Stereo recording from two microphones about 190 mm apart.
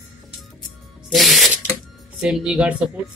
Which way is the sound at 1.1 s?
Centre (ahead or behind).